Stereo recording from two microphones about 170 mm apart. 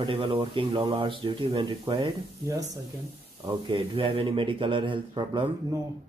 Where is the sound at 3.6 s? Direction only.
35° right (ahead or behind).